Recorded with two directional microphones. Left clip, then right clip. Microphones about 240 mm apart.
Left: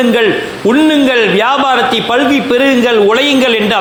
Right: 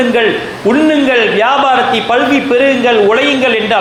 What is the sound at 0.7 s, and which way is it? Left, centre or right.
A man's voice, left.